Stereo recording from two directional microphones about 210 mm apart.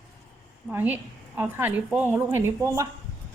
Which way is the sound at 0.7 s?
10° right (ahead or behind).